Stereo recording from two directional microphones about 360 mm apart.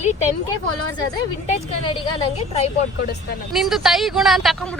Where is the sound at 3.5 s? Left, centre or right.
Centre.